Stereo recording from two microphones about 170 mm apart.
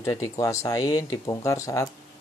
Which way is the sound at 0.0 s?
15° left (ahead or behind).